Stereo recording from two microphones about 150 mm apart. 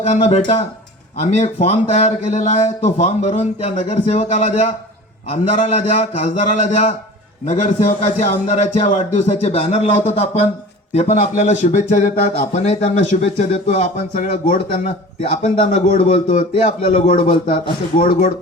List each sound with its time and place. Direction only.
0.0 s a man's voice: 50° left (ahead or behind)
16.8 s a man's voice: 40° left (ahead or behind)
17.1 s a man's voice: 65° left (ahead or behind)